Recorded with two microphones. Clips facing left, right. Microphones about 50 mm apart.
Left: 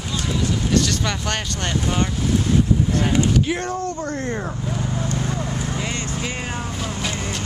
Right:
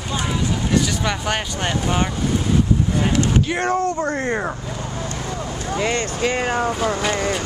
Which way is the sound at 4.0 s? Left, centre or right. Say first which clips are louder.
Right 4 dB; right.